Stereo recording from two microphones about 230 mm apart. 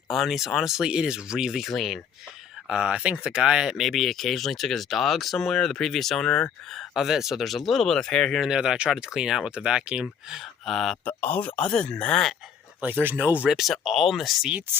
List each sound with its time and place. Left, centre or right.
0.1 s speech: centre
12.8 s speech: centre